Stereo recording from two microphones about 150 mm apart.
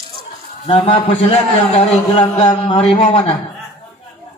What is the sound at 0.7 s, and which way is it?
Speech, 40° left (ahead or behind).